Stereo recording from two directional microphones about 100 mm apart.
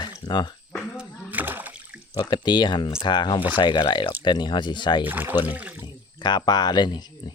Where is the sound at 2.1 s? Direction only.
50° left (ahead or behind).